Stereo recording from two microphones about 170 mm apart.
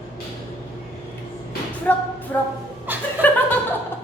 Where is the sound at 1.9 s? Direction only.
10° left (ahead or behind).